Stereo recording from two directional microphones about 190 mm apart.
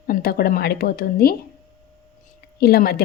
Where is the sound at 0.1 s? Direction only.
50° left (ahead or behind).